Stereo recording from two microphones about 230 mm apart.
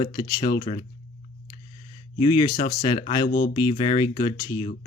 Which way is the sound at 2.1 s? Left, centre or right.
Centre.